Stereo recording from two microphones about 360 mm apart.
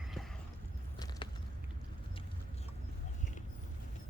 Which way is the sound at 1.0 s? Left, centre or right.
Centre.